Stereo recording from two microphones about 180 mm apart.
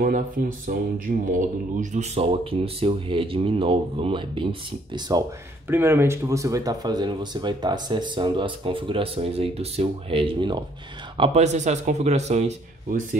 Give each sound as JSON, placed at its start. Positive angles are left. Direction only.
{"t": 0.0, "sound": "speech", "side_deg": -50}
{"t": 5.7, "sound": "speech", "side_deg": -15}